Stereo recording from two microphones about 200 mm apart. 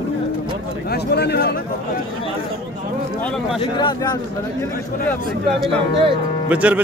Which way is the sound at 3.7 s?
20° left (ahead or behind).